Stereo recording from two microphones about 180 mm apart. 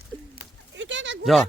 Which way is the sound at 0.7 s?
90° right.